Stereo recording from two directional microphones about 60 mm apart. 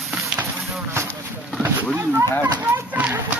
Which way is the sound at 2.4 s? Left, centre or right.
Right.